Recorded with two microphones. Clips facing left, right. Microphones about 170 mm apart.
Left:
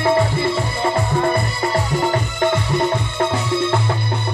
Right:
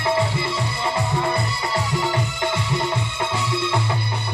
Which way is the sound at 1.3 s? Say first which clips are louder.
Left 4 dB; 55° left (ahead or behind).